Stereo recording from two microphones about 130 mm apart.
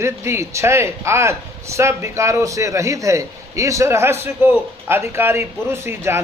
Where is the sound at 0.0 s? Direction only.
20° right (ahead or behind).